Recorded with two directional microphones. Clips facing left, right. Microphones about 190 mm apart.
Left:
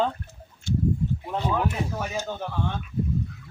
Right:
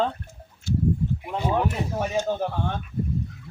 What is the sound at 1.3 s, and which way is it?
Speech, 10° right (ahead or behind).